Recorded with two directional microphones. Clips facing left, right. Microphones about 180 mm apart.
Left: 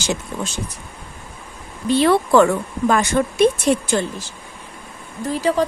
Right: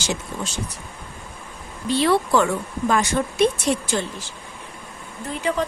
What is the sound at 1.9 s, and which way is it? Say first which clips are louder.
A woman's voice: left 4 dB; 55° left (ahead or behind).